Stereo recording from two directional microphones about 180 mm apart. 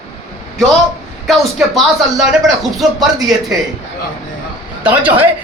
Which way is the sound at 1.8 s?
Centre (ahead or behind).